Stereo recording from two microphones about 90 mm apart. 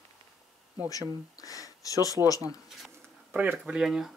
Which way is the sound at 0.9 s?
40° left (ahead or behind).